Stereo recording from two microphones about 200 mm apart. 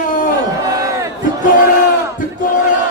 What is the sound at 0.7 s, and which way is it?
Crowd, 15° right (ahead or behind).